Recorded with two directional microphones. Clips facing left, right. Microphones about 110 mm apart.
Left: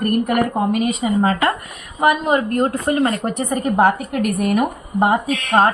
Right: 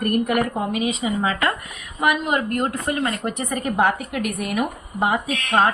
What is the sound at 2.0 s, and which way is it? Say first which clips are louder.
A woman's voice: left 5 dB; 35° left (ahead or behind).